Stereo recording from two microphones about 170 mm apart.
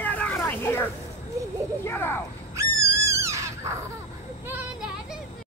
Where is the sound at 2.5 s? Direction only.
15° right (ahead or behind).